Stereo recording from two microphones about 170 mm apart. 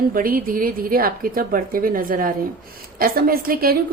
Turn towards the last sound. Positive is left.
turn(degrees=-60)  # may be behind; listen again after turning